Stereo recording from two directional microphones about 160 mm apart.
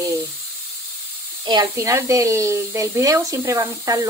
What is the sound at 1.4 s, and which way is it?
Speech, 25° right (ahead or behind).